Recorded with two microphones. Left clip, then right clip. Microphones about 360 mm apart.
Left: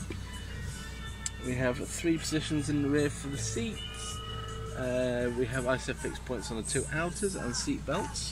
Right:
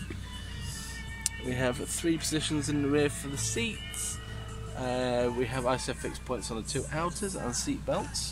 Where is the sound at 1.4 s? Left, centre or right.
Right.